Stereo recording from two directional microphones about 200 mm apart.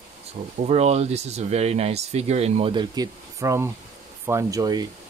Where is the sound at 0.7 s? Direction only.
30° right (ahead or behind).